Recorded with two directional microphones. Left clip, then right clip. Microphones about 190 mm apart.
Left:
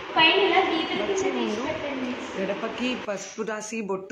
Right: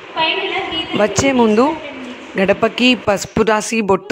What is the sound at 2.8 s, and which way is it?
Speech, 55° right (ahead or behind).